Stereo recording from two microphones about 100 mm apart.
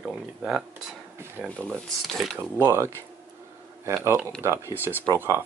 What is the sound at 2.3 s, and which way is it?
Speech, 25° right (ahead or behind).